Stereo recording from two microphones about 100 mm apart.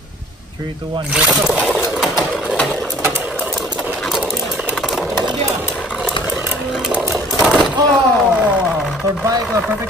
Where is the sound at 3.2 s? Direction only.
15° right (ahead or behind).